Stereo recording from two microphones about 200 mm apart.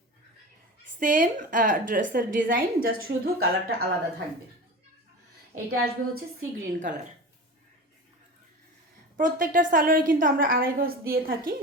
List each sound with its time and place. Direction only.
0.9 s a woman's voice: 40° right (ahead or behind)
5.7 s a woman's voice: 85° right
9.1 s a woman's voice: 40° right (ahead or behind)